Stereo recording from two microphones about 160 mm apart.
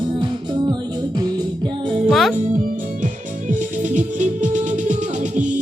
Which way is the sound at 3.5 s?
50° right (ahead or behind).